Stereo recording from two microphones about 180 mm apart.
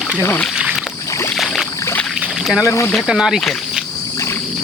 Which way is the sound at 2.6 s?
15° left (ahead or behind).